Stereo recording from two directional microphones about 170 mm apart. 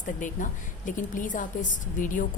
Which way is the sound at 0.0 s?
50° left (ahead or behind).